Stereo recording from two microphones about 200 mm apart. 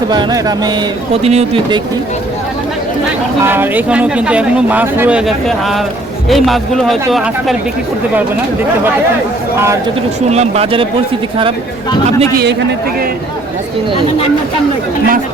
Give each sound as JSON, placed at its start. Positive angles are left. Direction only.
{"t": 0.1, "sound": "speech", "side_deg": -20}
{"t": 1.1, "sound": "speech", "side_deg": -30}
{"t": 3.4, "sound": "speech", "side_deg": -10}
{"t": 10.2, "sound": "speech", "side_deg": -35}